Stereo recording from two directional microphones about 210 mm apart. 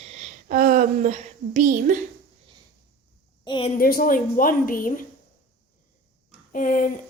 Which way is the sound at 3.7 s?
45° left (ahead or behind).